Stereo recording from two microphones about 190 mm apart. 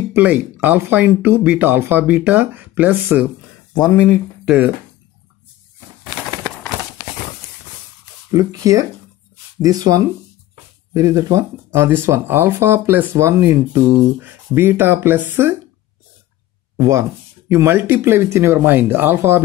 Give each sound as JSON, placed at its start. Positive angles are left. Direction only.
{"t": 0.1, "sound": "speech", "side_deg": -10}
{"t": 4.5, "sound": "speech", "side_deg": -10}
{"t": 8.3, "sound": "speech", "side_deg": -20}
{"t": 16.7, "sound": "speech", "side_deg": -15}